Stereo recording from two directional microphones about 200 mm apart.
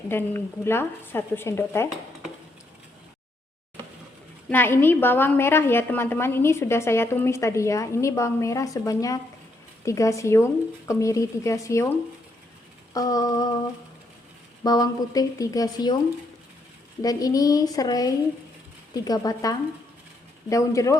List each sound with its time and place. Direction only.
0.1 s a woman's voice: 10° left (ahead or behind)
4.4 s a woman's voice: 10° left (ahead or behind)
12.9 s a woman's voice: 20° left (ahead or behind)
14.6 s a woman's voice: 20° left (ahead or behind)
17.0 s a woman's voice: 20° left (ahead or behind)